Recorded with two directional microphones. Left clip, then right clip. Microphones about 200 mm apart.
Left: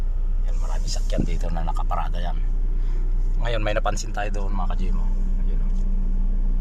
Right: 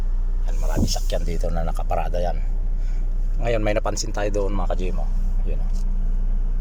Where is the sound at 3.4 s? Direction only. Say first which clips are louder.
Right 3 dB; 10° right (ahead or behind).